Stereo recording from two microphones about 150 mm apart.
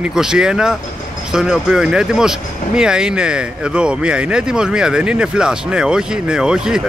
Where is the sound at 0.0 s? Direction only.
5° right (ahead or behind).